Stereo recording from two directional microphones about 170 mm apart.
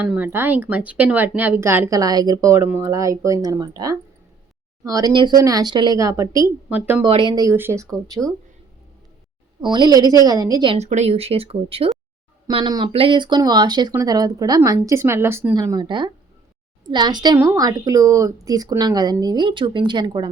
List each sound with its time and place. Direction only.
0.0 s speech: 10° right (ahead or behind)
7.0 s speech: 30° right (ahead or behind)
7.5 s speech: 15° right (ahead or behind)
9.6 s speech: 25° right (ahead or behind)
10.8 s speech: 40° right (ahead or behind); by 20.3 s 25° right (ahead or behind)